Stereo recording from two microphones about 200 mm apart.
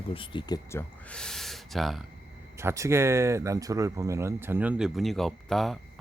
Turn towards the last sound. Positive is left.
turn(degrees=0)  # may be behind; listen again after turning